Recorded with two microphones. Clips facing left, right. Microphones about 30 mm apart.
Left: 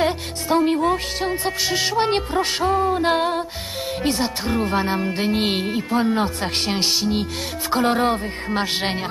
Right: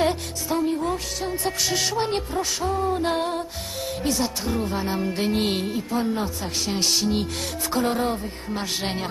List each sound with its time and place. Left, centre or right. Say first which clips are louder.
0.5 s music: left 6 dB; left
2.0 s speech: left 5 dB; left
2.8 s music: left 4 dB; left
4.5 s speech: left 5 dB; left
4.8 s music: left 3 dB; left
5.7 s speech: left 5 dB; left
6.8 s music: right 1 dB; centre
7.8 s speech: left 6 dB; left